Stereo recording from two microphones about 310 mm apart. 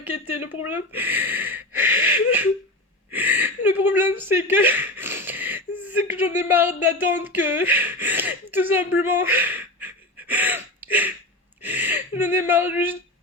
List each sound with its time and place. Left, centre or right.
0.0 s speech: centre
2.0 s a sound: centre
3.1 s speech: centre
9.0 s gasp: centre